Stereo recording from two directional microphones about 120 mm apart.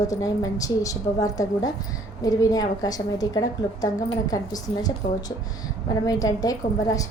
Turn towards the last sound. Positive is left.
turn(degrees=30)  # may be behind; listen again after turning